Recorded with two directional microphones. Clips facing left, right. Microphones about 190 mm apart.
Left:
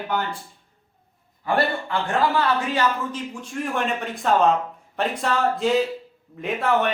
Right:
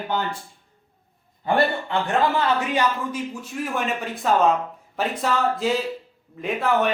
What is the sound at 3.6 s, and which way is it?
A man's voice, 5° right (ahead or behind).